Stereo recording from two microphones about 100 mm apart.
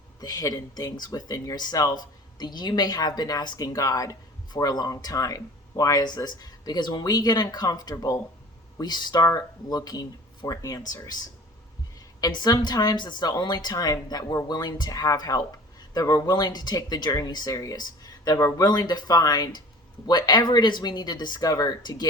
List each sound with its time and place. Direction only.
0.2 s speech: 40° left (ahead or behind)
12.2 s speech: 45° left (ahead or behind)